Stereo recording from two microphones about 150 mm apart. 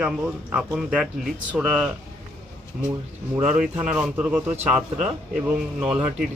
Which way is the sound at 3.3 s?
5° right (ahead or behind).